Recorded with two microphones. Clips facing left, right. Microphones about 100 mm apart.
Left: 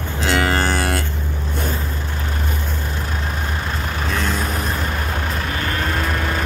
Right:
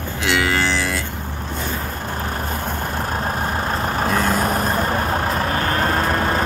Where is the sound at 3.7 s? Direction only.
40° right (ahead or behind).